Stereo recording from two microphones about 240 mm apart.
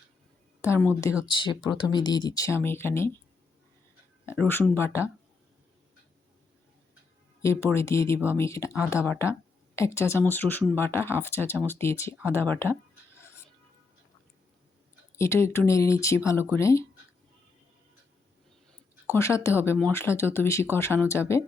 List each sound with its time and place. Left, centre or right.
0.6 s speech: centre
4.3 s speech: centre
7.4 s speech: centre
15.1 s speech: centre
19.1 s speech: centre